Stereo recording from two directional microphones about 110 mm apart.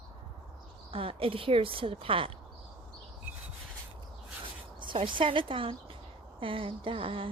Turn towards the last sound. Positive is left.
turn(degrees=-50)  # may be behind; listen again after turning